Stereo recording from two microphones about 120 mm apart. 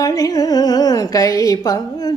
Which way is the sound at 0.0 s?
30° left (ahead or behind).